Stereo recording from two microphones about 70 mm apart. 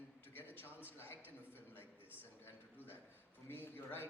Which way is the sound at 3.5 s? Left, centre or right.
Left.